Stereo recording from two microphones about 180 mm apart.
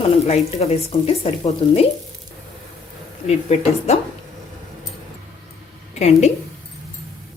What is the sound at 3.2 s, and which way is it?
Speech, 35° left (ahead or behind).